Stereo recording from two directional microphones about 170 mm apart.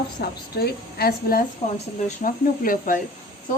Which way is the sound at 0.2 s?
65° left (ahead or behind).